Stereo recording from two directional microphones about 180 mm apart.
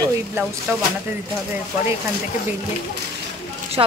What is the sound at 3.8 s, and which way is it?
Speech, 25° right (ahead or behind).